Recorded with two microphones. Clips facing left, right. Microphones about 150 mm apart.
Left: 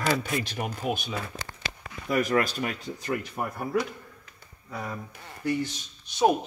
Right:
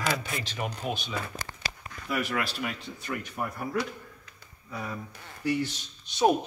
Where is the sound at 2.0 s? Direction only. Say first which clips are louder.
Left 6 dB; 40° left (ahead or behind).